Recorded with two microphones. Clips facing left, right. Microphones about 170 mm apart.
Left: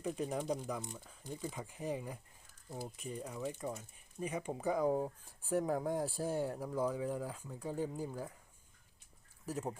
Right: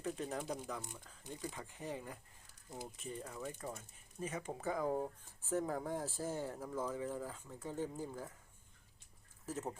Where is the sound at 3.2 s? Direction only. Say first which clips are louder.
Left 7 dB; 10° left (ahead or behind).